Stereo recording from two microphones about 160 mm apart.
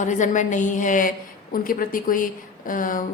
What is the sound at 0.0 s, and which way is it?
A woman's voice, 50° left (ahead or behind).